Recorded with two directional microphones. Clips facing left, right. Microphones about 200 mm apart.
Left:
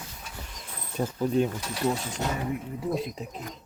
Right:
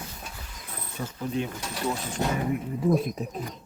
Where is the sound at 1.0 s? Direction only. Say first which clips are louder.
Left 6 dB; 35° left (ahead or behind).